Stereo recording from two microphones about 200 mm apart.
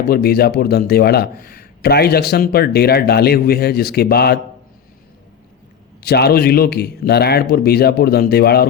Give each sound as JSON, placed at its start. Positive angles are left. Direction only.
{"t": 0.1, "sound": "a man's voice", "side_deg": 50}
{"t": 6.0, "sound": "a man's voice", "side_deg": 55}